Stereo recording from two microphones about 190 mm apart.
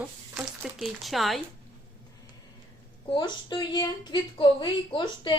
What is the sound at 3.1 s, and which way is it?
Speech, 25° left (ahead or behind).